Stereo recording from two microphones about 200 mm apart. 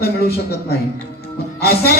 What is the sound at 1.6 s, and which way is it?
Speech, 50° left (ahead or behind).